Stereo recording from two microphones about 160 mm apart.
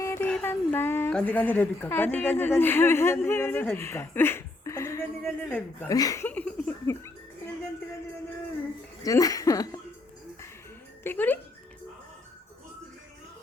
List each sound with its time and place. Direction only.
0.0 s child singing: 15° left (ahead or behind)
0.3 s a woman's voice: 10° left (ahead or behind)
5.9 s speech: 20° left (ahead or behind)
6.2 s music: 10° left (ahead or behind)
9.0 s speech: 20° left (ahead or behind)
11.0 s music: 10° left (ahead or behind)